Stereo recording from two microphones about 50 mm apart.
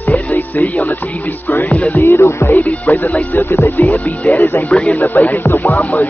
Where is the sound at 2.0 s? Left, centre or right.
Left.